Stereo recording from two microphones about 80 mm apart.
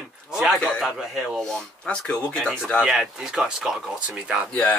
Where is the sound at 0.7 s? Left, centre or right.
Centre.